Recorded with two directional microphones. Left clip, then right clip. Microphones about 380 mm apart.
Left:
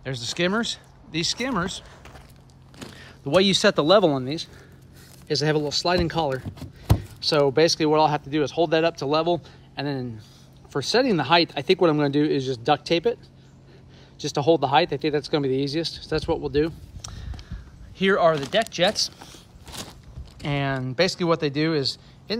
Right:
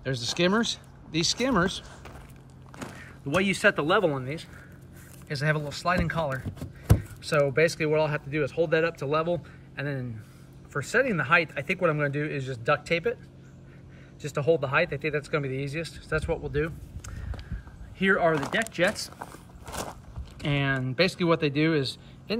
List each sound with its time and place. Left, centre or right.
0.0 s speech: centre
3.3 s speech: centre
14.1 s speech: centre
14.6 s speech: left
15.1 s speech: centre
19.6 s a sound: centre